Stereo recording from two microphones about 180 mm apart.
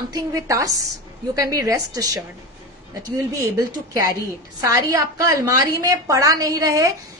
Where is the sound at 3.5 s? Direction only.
20° right (ahead or behind).